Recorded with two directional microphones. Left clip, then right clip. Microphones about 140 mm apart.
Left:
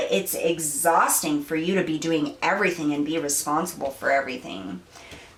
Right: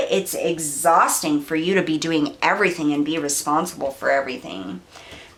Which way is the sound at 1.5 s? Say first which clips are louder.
Right 5 dB; 25° right (ahead or behind).